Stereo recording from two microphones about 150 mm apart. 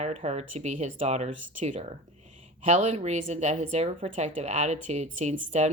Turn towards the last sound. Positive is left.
turn(degrees=-50)  # may be behind; listen again after turning